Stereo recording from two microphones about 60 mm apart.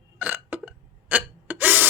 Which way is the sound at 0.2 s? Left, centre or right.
Right.